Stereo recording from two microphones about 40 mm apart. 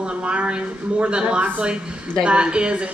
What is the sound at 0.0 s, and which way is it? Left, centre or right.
Speech, right.